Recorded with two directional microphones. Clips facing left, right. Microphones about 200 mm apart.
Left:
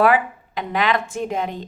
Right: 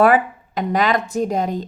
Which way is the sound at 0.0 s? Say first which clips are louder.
Right 3 dB; 45° right (ahead or behind).